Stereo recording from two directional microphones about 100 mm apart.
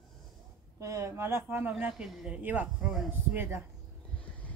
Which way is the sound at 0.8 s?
30° right (ahead or behind).